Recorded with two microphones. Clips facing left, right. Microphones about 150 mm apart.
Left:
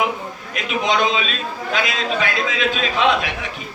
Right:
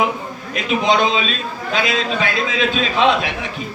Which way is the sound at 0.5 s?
30° right (ahead or behind).